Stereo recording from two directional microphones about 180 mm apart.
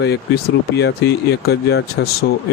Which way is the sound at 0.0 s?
70° left (ahead or behind).